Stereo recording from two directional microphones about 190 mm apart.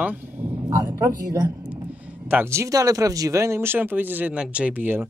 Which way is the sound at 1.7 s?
5° right (ahead or behind).